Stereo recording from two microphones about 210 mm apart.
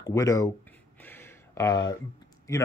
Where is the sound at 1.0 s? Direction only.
10° left (ahead or behind).